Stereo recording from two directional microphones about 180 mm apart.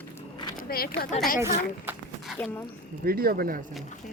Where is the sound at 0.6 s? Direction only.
55° left (ahead or behind).